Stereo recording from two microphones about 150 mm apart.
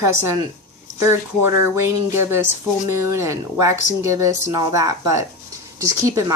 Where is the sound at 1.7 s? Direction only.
15° right (ahead or behind).